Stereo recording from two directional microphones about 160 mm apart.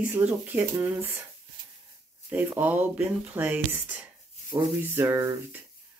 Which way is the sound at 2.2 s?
10° right (ahead or behind).